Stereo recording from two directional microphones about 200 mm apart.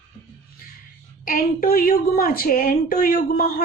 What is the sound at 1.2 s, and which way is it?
A woman's voice, 45° left (ahead or behind).